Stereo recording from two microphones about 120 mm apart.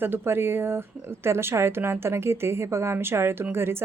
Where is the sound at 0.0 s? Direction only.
20° right (ahead or behind).